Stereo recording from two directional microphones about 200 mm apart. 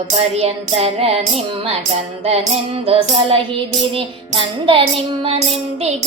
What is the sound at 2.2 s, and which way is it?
Music, 30° right (ahead or behind).